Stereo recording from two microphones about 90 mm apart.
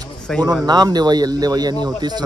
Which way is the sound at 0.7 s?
50° right (ahead or behind).